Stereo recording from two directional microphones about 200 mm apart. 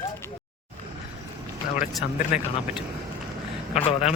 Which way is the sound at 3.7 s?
35° left (ahead or behind).